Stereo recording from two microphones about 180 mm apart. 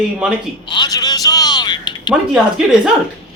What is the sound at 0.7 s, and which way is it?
A man's voice, 20° left (ahead or behind).